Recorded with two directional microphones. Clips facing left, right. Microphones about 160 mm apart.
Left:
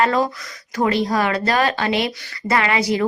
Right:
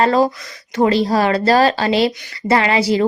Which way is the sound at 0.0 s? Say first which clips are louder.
Right 4 dB; 30° right (ahead or behind).